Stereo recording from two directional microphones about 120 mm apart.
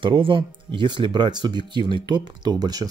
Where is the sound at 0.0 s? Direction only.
45° right (ahead or behind).